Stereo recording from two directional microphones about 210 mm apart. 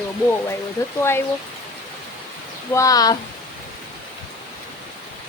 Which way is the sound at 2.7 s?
15° left (ahead or behind).